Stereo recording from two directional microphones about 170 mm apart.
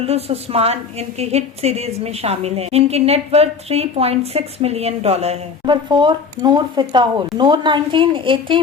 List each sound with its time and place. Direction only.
0.0 s a woman's voice: 35° right (ahead or behind)